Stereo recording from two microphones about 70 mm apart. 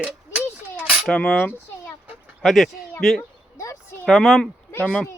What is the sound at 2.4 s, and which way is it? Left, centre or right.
Speech, centre.